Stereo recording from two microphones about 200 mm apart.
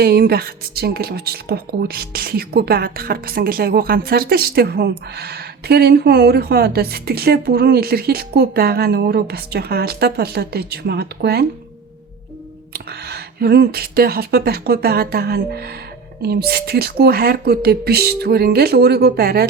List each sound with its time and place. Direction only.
0.0 s a woman's voice: 50° right (ahead or behind)
12.7 s a woman's voice: 55° right (ahead or behind)